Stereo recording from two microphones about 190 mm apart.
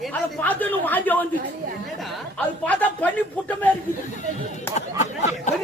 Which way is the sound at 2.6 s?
10° left (ahead or behind).